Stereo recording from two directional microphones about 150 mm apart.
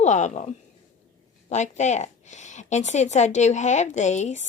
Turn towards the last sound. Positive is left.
turn(degrees=50)  # may be behind; listen again after turning